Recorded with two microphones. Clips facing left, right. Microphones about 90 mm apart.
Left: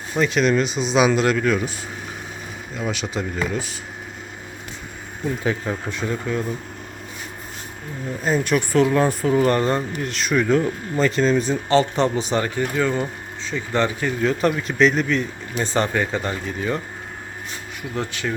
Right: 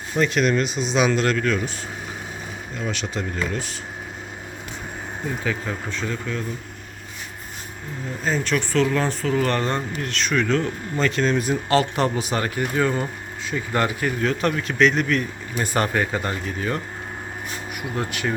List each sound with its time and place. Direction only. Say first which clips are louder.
0.2 s speech: left 1 dB; centre (ahead or behind)
2.7 s speech: left 2 dB; 5° left (ahead or behind)
5.5 s speech: left 3 dB; 15° left (ahead or behind)
8.2 s speech: left 3 dB; 10° left (ahead or behind)
9.5 s speech: left 4 dB; 10° left (ahead or behind)
17.9 s speech: even; 15° right (ahead or behind)